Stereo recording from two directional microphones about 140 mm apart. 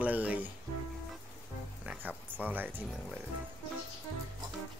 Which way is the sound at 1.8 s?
15° right (ahead or behind).